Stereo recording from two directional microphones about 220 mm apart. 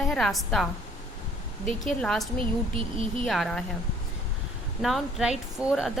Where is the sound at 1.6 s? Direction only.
35° left (ahead or behind).